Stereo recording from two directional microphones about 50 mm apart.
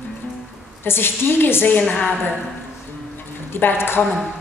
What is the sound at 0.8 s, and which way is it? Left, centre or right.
Speech, left.